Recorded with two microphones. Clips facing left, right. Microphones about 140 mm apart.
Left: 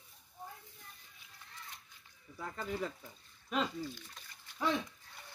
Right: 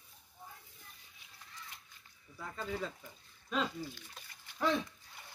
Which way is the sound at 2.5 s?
15° left (ahead or behind).